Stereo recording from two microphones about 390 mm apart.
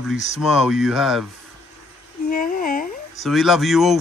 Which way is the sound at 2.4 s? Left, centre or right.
Left.